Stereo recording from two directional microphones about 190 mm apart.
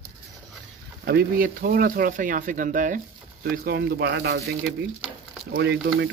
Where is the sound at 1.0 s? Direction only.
55° right (ahead or behind).